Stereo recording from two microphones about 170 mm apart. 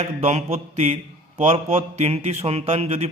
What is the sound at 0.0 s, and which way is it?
A man's voice, 40° right (ahead or behind).